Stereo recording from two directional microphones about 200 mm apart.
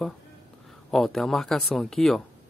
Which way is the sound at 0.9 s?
Centre (ahead or behind).